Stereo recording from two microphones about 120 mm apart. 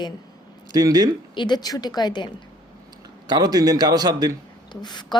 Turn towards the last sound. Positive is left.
turn(degrees=35)  # may be behind; listen again after turning